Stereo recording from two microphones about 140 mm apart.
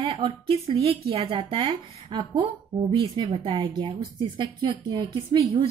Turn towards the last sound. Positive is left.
turn(degrees=-45)  # may be behind; listen again after turning